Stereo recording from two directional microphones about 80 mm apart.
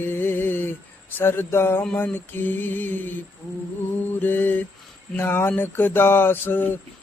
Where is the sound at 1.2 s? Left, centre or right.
Left.